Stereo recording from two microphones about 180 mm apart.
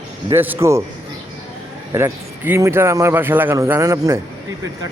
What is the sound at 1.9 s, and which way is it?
Speech, 10° right (ahead or behind).